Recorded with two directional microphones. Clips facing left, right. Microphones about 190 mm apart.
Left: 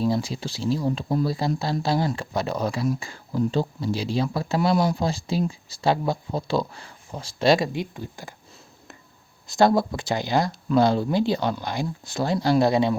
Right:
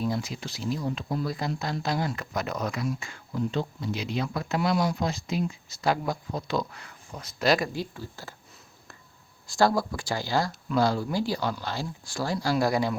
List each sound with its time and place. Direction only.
0.0 s speech: 30° left (ahead or behind)
9.5 s speech: 20° left (ahead or behind)